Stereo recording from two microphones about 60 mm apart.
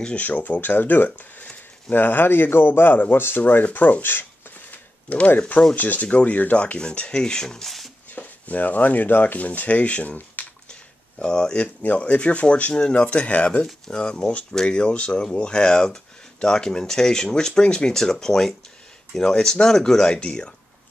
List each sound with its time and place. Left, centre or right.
0.2 s speech: left
5.8 s speech: left; by 7.9 s centre
8.1 s speech: left
10.7 s speech: centre